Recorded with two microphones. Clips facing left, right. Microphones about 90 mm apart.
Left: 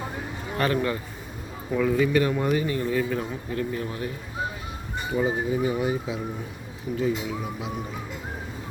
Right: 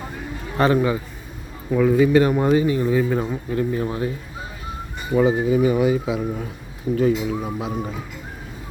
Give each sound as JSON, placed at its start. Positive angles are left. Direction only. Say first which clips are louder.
{"t": 0.8, "sound": "a man's voice", "louder": "right 6 dB", "side_deg": -10}
{"t": 5.1, "sound": "speech", "louder": "right 8 dB", "side_deg": -90}
{"t": 6.9, "sound": "speech", "louder": "right 7 dB", "side_deg": -50}